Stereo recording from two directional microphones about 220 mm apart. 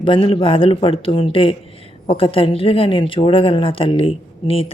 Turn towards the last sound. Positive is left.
turn(degrees=25)  # may be behind; listen again after turning